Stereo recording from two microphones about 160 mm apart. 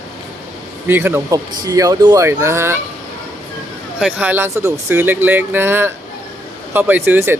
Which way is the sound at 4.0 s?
10° right (ahead or behind).